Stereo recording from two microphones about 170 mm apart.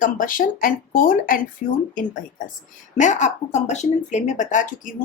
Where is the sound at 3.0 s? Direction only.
45° left (ahead or behind).